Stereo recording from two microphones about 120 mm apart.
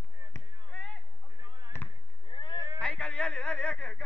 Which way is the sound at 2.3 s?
40° left (ahead or behind).